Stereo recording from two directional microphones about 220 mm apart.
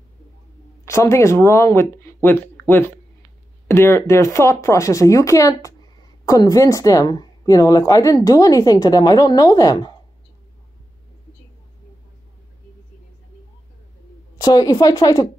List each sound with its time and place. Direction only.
0.8 s speech: 15° left (ahead or behind)
3.6 s speech: 10° left (ahead or behind)
14.4 s speech: 15° left (ahead or behind)